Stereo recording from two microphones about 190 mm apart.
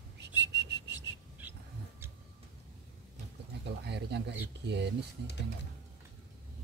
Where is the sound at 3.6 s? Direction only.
60° right (ahead or behind).